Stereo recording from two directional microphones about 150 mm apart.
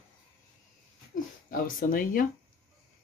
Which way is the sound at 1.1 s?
65° left (ahead or behind).